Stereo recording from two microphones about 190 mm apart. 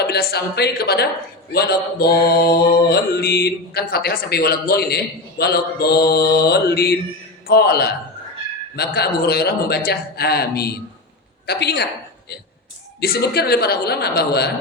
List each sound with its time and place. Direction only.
0.0 s speech: 55° left (ahead or behind)
13.0 s speech: 55° left (ahead or behind)